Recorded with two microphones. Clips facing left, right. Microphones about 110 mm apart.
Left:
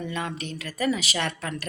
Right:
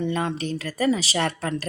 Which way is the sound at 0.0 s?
30° right (ahead or behind).